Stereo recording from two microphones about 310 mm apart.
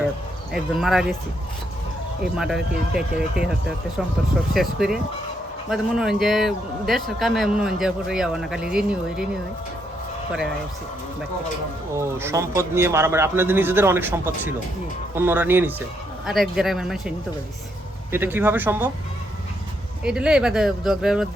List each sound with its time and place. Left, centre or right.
0.5 s speech: centre
2.3 s speech: centre
4.5 s speech: centre
11.9 s a man's voice: centre
20.1 s speech: centre